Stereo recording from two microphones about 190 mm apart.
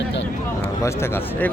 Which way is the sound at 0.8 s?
15° left (ahead or behind).